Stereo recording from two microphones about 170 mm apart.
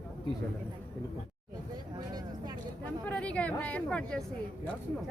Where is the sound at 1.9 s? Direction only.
25° right (ahead or behind).